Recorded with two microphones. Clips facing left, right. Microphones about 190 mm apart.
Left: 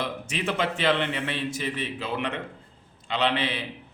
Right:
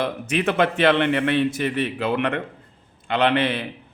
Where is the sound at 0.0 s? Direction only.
60° right (ahead or behind).